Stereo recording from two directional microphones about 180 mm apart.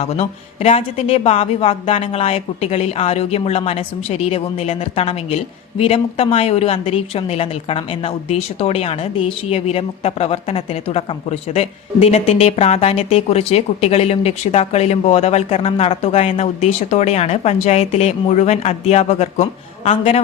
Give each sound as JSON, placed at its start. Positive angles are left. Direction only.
{"t": 0.0, "sound": "a woman's voice", "side_deg": 35}